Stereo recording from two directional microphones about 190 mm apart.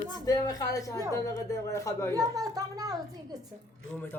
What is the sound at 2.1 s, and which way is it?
Speech, 20° right (ahead or behind).